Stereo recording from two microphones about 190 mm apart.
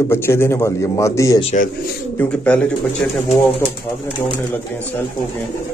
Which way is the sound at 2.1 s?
5° left (ahead or behind).